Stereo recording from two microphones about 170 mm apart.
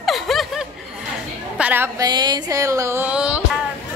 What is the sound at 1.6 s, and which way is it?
Speech, 10° right (ahead or behind).